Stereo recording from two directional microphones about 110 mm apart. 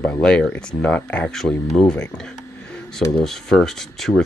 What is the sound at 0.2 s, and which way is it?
Speech, 5° left (ahead or behind).